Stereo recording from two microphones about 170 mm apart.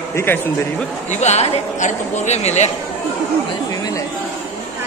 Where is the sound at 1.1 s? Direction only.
40° left (ahead or behind).